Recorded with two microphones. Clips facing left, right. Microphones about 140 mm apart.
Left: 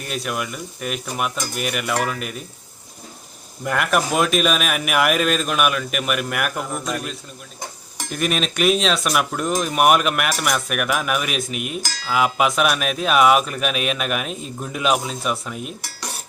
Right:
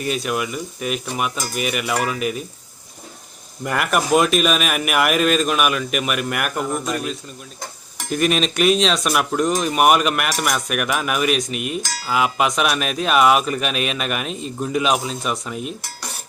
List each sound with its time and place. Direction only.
0.0 s speech: centre (ahead or behind)
3.6 s speech: centre (ahead or behind)